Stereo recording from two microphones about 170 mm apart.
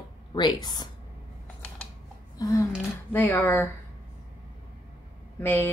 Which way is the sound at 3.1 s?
10° left (ahead or behind).